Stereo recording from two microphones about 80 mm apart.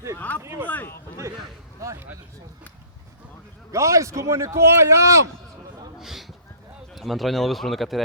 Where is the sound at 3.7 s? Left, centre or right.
Right.